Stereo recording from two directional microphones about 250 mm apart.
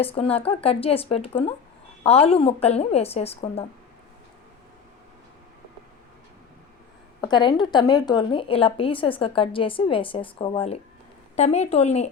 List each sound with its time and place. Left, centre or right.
0.0 s a woman's voice: left
7.2 s a woman's voice: centre